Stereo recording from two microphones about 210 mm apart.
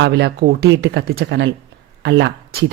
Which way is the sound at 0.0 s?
55° right (ahead or behind).